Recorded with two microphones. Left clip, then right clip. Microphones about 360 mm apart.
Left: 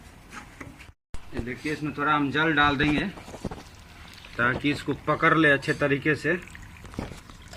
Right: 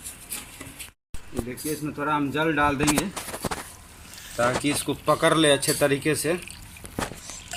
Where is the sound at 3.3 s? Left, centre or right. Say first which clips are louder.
Right 7 dB; right.